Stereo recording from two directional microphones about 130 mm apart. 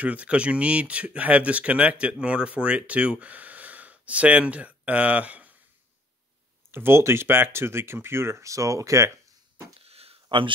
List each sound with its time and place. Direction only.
0.0 s speech: 10° right (ahead or behind)
6.7 s speech: 20° right (ahead or behind)
9.8 s a sound: 50° right (ahead or behind)